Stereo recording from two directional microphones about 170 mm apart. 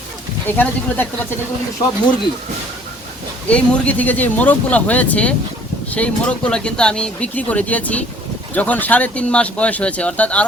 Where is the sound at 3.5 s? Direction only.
5° left (ahead or behind).